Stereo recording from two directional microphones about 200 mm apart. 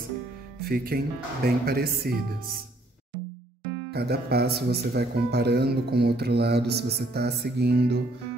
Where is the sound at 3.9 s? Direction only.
55° right (ahead or behind).